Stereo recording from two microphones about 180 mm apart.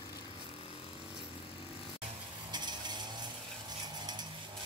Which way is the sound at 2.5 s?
25° right (ahead or behind).